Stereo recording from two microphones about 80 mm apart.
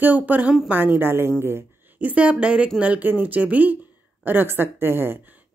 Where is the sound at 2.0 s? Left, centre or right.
Centre.